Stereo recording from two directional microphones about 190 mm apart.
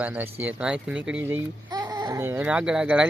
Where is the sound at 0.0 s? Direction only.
10° right (ahead or behind).